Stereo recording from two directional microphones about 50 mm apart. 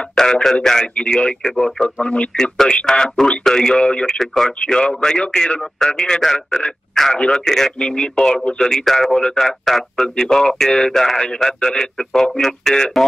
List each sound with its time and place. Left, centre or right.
0.1 s radio: centre
1.1 s a man's voice: left
4.2 s a man's voice: centre
7.4 s a man's voice: centre